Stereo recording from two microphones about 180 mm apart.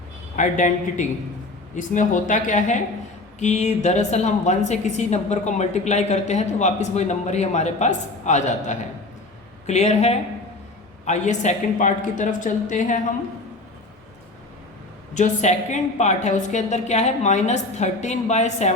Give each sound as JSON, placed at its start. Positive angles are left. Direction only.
{"t": 0.3, "sound": "a woman's voice", "side_deg": 45}
{"t": 15.1, "sound": "a woman's voice", "side_deg": 40}